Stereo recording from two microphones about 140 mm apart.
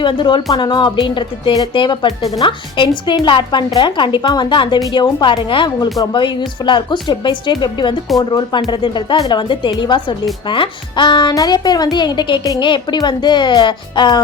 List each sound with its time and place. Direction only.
0.0 s speech: 35° left (ahead or behind)